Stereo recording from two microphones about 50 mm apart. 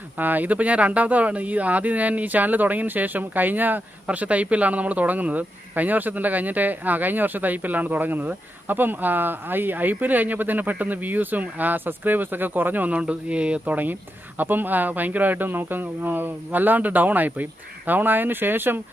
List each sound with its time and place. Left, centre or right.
0.2 s speech: right
13.0 s speech: right